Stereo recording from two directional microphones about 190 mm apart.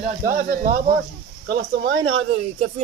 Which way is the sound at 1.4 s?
60° right (ahead or behind).